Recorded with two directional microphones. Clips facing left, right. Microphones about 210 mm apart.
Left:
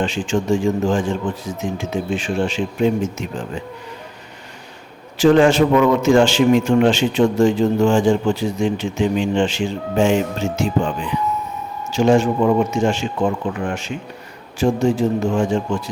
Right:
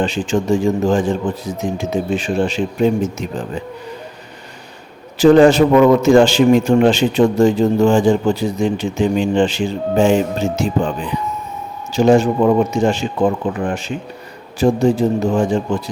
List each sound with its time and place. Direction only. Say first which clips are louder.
0.0 s a man's voice: right 2 dB; 35° right (ahead or behind)
5.1 s a man's voice: right 4 dB; 35° right (ahead or behind)